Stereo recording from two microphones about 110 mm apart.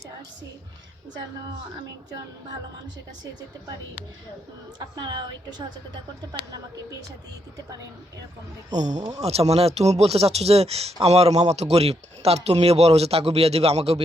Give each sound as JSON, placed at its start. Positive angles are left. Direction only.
{"t": 4.9, "sound": "a woman's voice", "side_deg": -45}
{"t": 8.7, "sound": "speech", "side_deg": -90}
{"t": 9.2, "sound": "speech", "side_deg": -70}